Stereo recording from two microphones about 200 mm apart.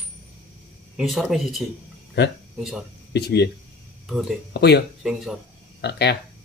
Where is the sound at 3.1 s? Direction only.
55° left (ahead or behind).